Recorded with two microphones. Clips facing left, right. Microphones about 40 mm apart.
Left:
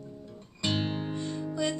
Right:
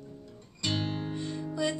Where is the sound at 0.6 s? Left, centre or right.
Left.